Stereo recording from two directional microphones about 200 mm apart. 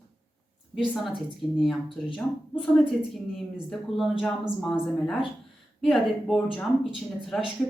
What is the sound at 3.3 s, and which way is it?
A woman's voice, centre (ahead or behind).